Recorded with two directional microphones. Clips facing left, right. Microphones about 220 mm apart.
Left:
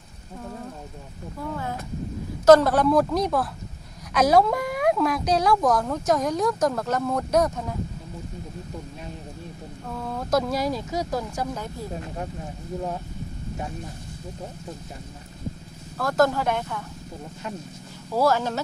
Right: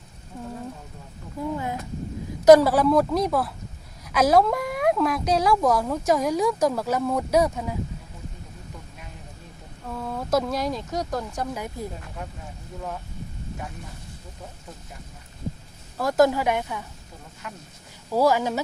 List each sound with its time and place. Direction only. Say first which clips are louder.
1.4 s speech: right 3 dB; 15° right (ahead or behind)
9.8 s speech: right 1 dB; centre (ahead or behind)
11.5 s speech: right 1 dB; 15° right (ahead or behind)
12.0 s speech: left 5 dB; 30° left (ahead or behind)
16.0 s speech: right 2 dB; 15° right (ahead or behind)
18.1 s speech: right 1 dB; 10° right (ahead or behind)